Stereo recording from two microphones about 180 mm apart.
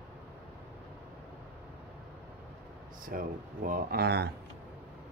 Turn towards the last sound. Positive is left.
turn(degrees=-65)  # may be behind; listen again after turning